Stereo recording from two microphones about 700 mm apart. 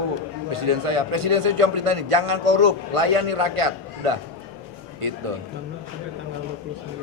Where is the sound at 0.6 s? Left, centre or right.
Right.